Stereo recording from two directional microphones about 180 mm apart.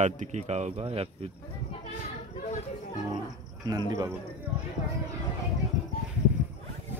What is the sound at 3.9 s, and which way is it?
Speech, 20° right (ahead or behind).